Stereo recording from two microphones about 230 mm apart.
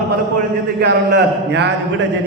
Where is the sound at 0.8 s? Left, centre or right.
Right.